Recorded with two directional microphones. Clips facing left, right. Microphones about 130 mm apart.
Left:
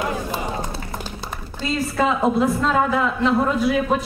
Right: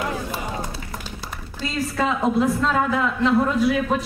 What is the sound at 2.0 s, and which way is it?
A man's voice, 20° left (ahead or behind).